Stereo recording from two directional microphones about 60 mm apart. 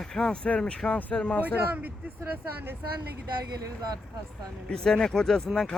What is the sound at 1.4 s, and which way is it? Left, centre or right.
Speech, right.